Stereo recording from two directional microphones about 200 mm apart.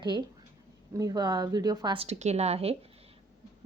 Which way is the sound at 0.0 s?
20° right (ahead or behind).